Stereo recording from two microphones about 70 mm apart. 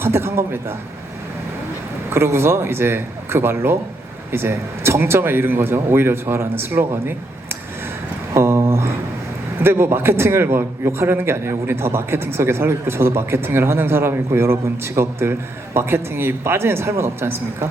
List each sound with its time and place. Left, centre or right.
0.0 s a man's voice: right
2.0 s a man's voice: right
8.3 s a sound: right
9.6 s a man's voice: right